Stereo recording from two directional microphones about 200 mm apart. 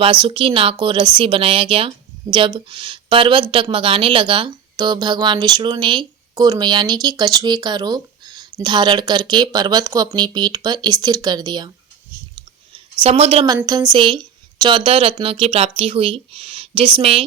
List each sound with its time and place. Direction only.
0.0 s speech: 25° right (ahead or behind)
12.4 s clicking: 25° right (ahead or behind)
13.7 s speech: 20° right (ahead or behind)